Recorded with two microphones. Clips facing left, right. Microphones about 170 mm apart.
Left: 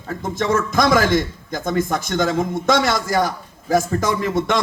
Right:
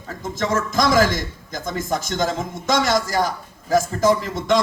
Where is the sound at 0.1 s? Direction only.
55° left (ahead or behind).